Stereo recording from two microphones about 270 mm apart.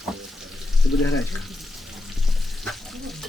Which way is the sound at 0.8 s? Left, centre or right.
Left.